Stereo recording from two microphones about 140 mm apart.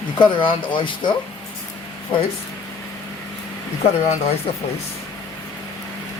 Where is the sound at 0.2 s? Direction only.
35° left (ahead or behind).